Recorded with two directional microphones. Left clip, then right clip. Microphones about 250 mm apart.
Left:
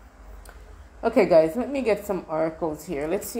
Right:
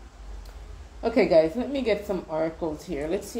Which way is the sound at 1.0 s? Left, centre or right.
Centre.